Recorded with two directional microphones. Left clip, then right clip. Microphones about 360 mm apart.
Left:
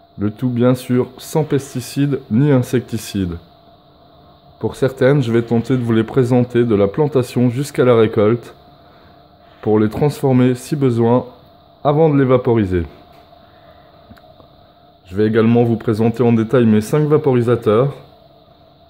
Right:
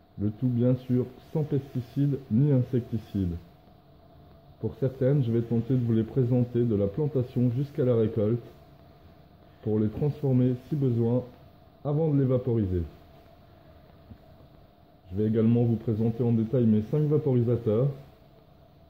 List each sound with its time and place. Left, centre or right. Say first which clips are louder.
0.2 s speech: left 12 dB; centre
4.6 s speech: left 13 dB; centre
9.7 s speech: left 14 dB; centre
15.1 s speech: left 13 dB; centre